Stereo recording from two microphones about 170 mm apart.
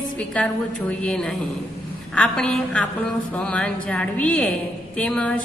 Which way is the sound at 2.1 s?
5° left (ahead or behind).